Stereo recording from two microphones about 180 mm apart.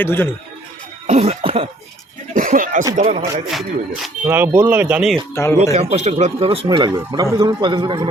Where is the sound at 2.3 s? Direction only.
50° right (ahead or behind).